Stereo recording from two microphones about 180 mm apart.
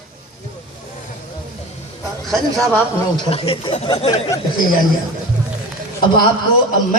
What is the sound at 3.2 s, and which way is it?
Speech, 30° left (ahead or behind).